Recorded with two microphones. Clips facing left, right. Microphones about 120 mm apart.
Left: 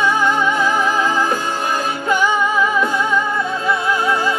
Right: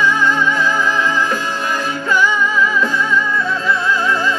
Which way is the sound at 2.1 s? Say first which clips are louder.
Even; 20° left (ahead or behind).